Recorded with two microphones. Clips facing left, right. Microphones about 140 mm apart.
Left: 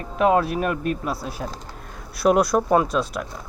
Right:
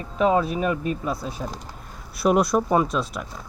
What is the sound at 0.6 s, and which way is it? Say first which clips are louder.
Speech: even; 60° left (ahead or behind).